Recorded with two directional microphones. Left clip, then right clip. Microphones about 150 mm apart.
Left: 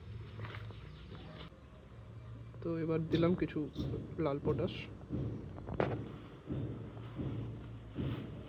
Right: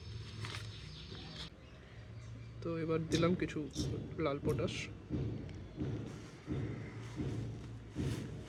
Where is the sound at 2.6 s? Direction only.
20° left (ahead or behind).